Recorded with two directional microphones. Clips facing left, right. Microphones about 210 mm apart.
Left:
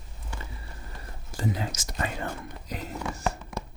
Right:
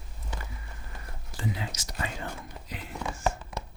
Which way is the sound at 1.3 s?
45° left (ahead or behind).